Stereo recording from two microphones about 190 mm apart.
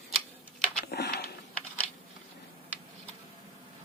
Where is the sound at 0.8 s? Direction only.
55° left (ahead or behind).